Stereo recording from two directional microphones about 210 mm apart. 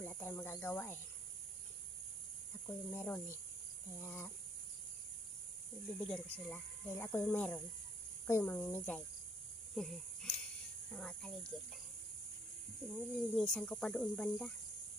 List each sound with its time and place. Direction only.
0.0 s cricket: 10° left (ahead or behind)
2.6 s speech: 10° left (ahead or behind)
5.9 s speech: 5° left (ahead or behind)
12.9 s speech: centre (ahead or behind)